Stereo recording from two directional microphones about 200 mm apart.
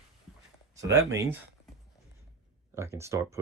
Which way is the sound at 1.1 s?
15° right (ahead or behind).